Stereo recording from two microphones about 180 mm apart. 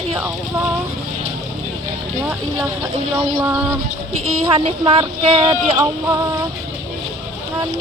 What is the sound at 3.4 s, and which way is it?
Speech, 10° right (ahead or behind).